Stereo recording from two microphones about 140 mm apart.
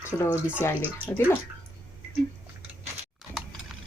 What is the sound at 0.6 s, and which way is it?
Speech, 20° left (ahead or behind).